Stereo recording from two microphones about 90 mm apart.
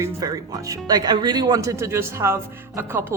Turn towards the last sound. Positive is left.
turn(degrees=-25)  # may be behind; listen again after turning